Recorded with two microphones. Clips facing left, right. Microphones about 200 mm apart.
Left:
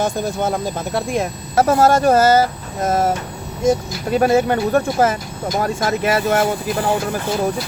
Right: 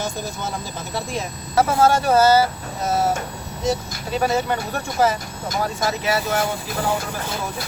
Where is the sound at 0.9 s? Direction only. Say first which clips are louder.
Left 5 dB; 55° left (ahead or behind).